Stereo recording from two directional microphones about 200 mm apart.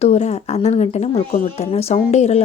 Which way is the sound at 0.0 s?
35° left (ahead or behind).